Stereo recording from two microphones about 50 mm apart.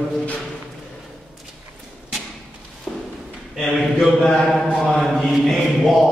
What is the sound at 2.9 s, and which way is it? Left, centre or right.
Walk, centre.